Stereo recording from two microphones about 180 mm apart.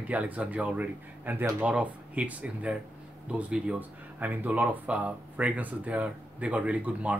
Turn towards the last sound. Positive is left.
turn(degrees=-5)  # may be behind; listen again after turning